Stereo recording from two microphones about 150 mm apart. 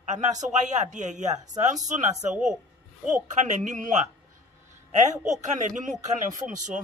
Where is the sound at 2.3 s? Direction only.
5° right (ahead or behind).